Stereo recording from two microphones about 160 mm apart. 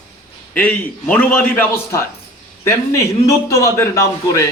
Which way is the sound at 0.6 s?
10° left (ahead or behind).